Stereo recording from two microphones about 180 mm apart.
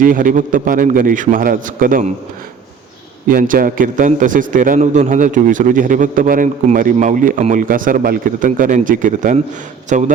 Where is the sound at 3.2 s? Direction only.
50° right (ahead or behind).